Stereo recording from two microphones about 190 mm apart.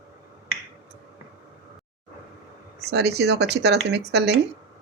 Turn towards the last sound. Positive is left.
turn(degrees=-60)  # may be behind; listen again after turning